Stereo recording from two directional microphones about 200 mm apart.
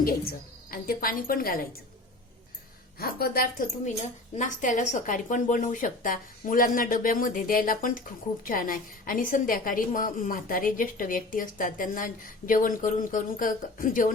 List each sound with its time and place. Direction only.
0.0 s a woman's voice: 45° left (ahead or behind)
3.0 s a woman's voice: 50° left (ahead or behind)
3.8 s a woman's voice: 35° left (ahead or behind)